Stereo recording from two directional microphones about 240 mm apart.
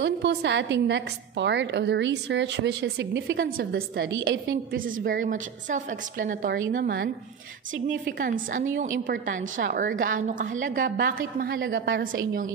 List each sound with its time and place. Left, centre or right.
0.0 s a woman's voice: right
8.2 s a woman's voice: right